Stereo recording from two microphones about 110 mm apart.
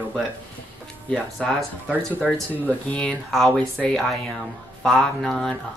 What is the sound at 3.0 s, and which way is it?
Speech, 5° left (ahead or behind).